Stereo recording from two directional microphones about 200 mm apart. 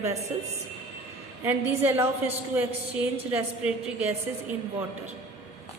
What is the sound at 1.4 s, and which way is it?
A woman's voice, 10° right (ahead or behind).